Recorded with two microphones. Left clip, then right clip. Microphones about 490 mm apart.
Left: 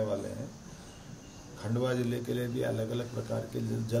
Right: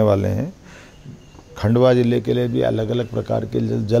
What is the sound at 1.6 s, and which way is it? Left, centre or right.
A man's voice, right.